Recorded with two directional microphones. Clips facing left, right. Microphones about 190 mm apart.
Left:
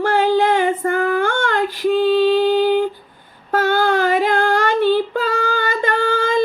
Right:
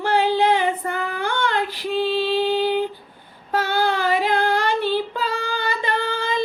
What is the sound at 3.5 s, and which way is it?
Child singing, 45° left (ahead or behind).